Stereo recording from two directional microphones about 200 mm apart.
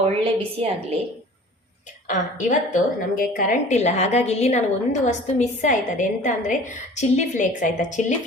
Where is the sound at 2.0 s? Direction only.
40° left (ahead or behind).